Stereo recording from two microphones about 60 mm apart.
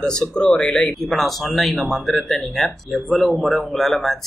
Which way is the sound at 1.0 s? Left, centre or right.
Centre.